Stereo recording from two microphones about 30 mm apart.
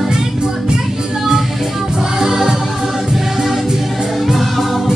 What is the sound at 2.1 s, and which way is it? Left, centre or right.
Music, centre.